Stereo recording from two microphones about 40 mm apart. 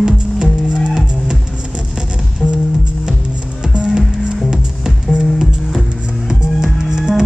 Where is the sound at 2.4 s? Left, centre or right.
Centre.